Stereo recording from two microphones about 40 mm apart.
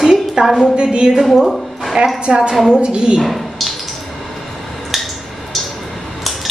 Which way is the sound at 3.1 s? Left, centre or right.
Centre.